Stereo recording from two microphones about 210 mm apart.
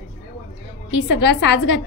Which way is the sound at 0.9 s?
55° left (ahead or behind).